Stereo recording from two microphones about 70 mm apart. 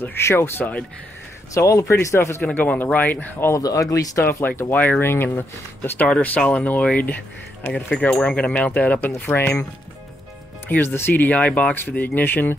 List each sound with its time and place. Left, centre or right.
0.0 s speech: left
1.5 s speech: left
2.4 s speech: left
3.5 s speech: left
4.3 s speech: left
6.0 s speech: centre
8.1 s speech: centre; by 9.6 s left
10.7 s speech: left